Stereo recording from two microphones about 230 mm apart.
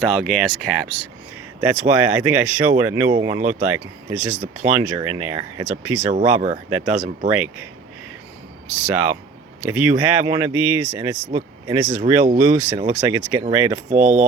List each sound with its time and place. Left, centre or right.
0.0 s speech: centre
6.1 s speech: right
6.7 s speech: centre
6.9 s speech: right
7.3 s speech: centre
8.9 s speech: centre
13.9 s speech: right